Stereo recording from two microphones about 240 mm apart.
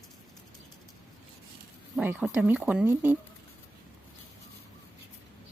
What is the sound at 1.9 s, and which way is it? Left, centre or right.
Speech, centre.